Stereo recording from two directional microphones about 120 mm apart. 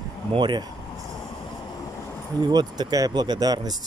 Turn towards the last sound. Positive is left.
turn(degrees=-35)  # may be behind; listen again after turning